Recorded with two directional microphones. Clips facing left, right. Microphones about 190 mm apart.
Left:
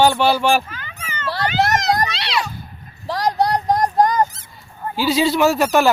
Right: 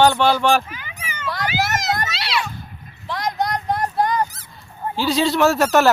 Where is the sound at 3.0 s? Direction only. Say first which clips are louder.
Left 5 dB; 35° left (ahead or behind).